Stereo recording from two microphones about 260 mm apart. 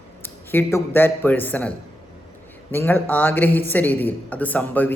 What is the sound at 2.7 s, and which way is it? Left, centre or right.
Speech, centre.